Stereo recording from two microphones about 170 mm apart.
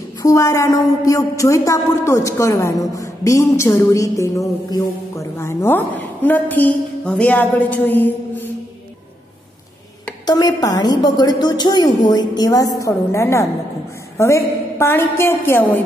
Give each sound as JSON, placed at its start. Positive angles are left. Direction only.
{"t": 0.2, "sound": "a woman's voice", "side_deg": 20}
{"t": 10.2, "sound": "a woman's voice", "side_deg": 25}